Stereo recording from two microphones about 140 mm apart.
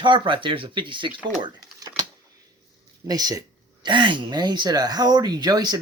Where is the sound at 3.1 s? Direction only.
25° right (ahead or behind).